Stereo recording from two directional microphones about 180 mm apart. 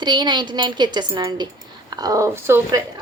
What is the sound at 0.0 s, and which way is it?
A woman's voice, 25° right (ahead or behind).